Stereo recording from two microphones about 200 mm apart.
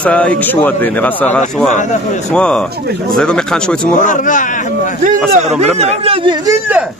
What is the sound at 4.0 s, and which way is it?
Speech, 40° left (ahead or behind).